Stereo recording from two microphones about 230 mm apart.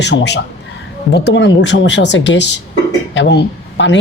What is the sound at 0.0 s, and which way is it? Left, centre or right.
Speech, left.